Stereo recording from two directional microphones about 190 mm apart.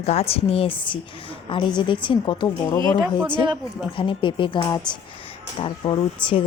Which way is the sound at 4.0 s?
25° left (ahead or behind).